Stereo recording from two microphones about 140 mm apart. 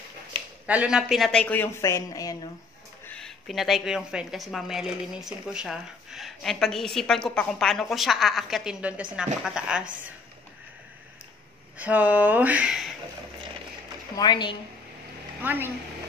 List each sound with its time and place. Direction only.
0.7 s speech: 5° right (ahead or behind); by 2.5 s 25° left (ahead or behind)
3.1 s a woman's voice: 5° left (ahead or behind)
11.8 s speech: 10° right (ahead or behind)
14.1 s a woman's voice: 30° left (ahead or behind)
15.4 s speech: 15° right (ahead or behind)